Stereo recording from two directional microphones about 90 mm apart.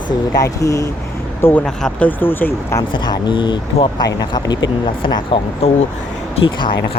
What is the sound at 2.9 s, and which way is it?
Speech, 55° left (ahead or behind).